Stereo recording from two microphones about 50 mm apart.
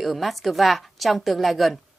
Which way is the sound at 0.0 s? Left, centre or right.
Centre.